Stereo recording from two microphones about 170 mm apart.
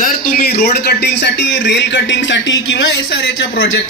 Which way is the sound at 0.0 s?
60° left (ahead or behind).